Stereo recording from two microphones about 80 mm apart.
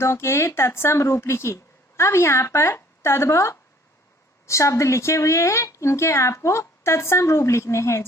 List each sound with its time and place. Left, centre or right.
0.0 s speech: left